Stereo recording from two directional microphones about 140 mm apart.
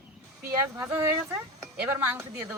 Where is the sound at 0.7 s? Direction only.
20° right (ahead or behind).